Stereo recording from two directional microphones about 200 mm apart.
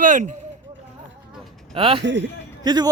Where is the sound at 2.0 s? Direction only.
65° right (ahead or behind).